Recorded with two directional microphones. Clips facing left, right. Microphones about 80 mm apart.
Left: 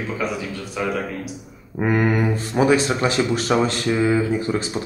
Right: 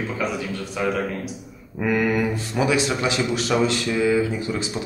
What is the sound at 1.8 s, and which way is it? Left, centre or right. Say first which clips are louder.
Speech: left 2 dB; left.